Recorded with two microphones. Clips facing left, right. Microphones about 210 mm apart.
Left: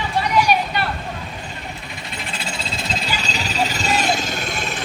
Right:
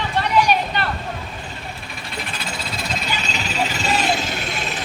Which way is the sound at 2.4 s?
25° left (ahead or behind).